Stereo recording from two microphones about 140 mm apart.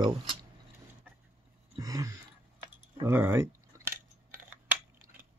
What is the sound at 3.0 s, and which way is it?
Speech, 15° right (ahead or behind).